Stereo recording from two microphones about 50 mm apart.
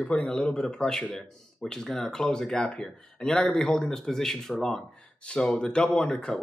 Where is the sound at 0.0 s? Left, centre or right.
Centre.